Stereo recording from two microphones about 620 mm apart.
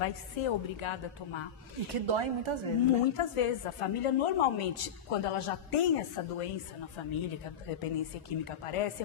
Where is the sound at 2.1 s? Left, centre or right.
Right.